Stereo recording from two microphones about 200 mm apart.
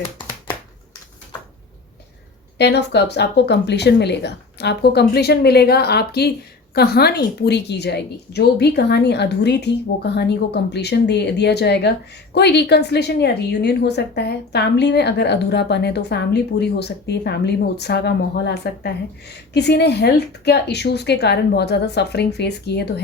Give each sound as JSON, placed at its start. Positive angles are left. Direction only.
{"t": 2.6, "sound": "a woman's voice", "side_deg": 55}